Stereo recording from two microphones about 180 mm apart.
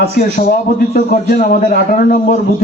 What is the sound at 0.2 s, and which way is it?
A man's voice, 55° left (ahead or behind).